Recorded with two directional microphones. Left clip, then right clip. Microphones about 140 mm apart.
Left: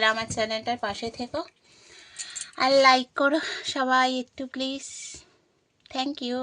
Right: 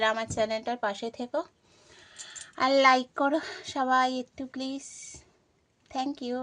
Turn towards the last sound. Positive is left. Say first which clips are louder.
# left 3 dB
turn(degrees=10)  # may be behind; listen again after turning